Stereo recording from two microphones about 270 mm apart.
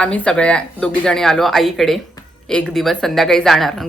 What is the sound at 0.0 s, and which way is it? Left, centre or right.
A woman's voice, centre.